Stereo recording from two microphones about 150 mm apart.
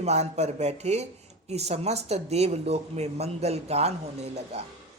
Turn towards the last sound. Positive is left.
turn(degrees=-45)  # may be behind; listen again after turning